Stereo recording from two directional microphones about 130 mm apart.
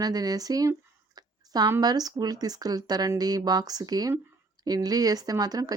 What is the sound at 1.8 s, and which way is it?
Speech, 30° right (ahead or behind).